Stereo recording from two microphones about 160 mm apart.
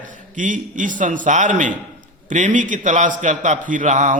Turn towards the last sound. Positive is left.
turn(degrees=-50)  # may be behind; listen again after turning